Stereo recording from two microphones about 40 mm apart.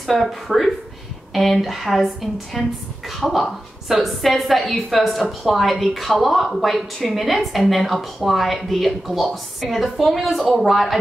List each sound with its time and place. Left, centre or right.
0.0 s a woman's voice: centre